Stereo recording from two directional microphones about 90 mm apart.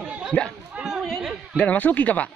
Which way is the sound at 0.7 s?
5° right (ahead or behind).